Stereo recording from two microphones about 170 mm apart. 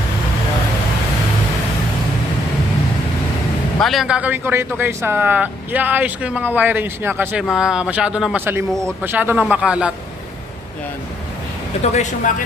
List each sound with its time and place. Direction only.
3.8 s a man's voice: centre (ahead or behind)
8.7 s speech: 5° left (ahead or behind)
9.0 s a man's voice: 10° right (ahead or behind)
11.8 s speech: 45° left (ahead or behind)